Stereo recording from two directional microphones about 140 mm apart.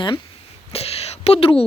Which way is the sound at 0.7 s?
45° left (ahead or behind).